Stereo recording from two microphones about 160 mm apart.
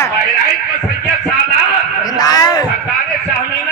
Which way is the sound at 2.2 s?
25° left (ahead or behind).